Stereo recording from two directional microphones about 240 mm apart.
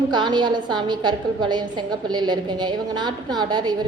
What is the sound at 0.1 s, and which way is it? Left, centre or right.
A woman's voice, centre.